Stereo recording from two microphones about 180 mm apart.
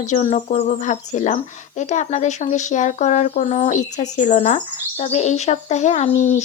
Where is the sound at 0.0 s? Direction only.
45° left (ahead or behind).